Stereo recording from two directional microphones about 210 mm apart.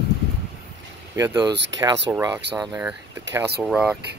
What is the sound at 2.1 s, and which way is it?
Speech, 10° right (ahead or behind).